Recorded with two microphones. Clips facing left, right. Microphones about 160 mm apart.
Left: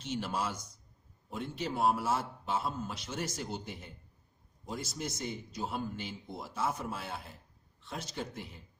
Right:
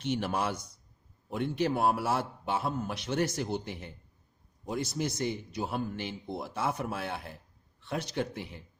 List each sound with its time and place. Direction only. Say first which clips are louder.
0.0 s a man's voice: right 4 dB; 60° right (ahead or behind)